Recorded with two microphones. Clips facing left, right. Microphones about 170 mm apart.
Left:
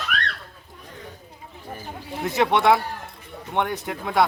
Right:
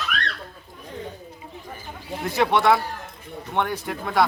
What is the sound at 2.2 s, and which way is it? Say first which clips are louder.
Speech: even; 20° left (ahead or behind).